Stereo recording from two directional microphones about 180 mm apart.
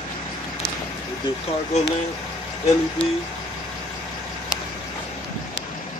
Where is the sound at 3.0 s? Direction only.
80° left.